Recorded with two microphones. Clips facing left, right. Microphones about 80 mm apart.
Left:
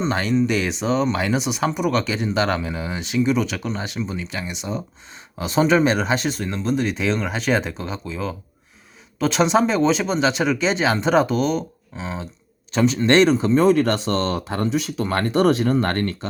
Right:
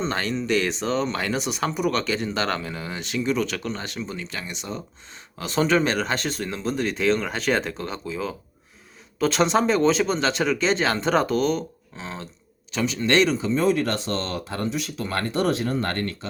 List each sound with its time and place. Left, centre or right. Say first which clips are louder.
0.0 s speech: left 6 dB; centre
12.7 s speech: left 5 dB; left
13.3 s speech: left 6 dB; left